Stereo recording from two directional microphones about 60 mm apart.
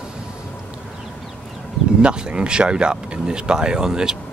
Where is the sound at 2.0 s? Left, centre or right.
Centre.